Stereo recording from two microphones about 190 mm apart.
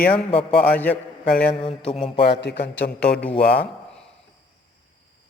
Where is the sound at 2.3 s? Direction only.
65° left (ahead or behind).